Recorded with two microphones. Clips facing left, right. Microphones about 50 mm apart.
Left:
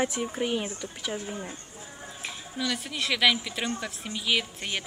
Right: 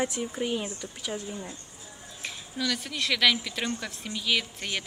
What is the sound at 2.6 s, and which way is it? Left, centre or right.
Speech, centre.